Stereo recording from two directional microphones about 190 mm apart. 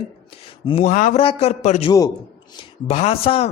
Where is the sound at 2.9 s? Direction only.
35° left (ahead or behind).